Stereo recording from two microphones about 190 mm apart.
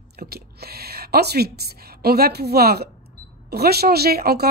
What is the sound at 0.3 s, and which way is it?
A woman's voice, 55° right (ahead or behind).